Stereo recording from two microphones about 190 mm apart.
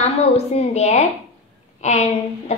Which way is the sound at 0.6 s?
35° left (ahead or behind).